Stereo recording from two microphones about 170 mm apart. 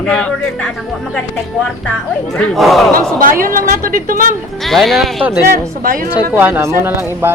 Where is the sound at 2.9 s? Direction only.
55° right (ahead or behind).